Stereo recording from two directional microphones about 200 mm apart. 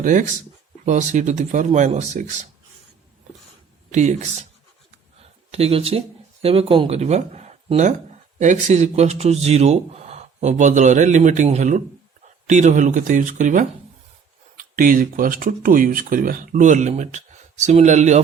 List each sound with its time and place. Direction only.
0.0 s speech: 40° right (ahead or behind)
3.9 s speech: 35° right (ahead or behind)
5.5 s speech: 30° right (ahead or behind)